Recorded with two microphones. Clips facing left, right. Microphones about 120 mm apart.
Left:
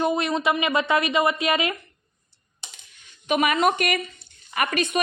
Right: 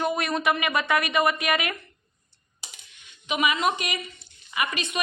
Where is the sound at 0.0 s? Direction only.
20° left (ahead or behind).